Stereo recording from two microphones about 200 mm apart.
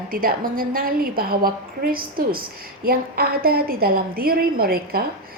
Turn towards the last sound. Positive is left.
turn(degrees=-50)  # may be behind; listen again after turning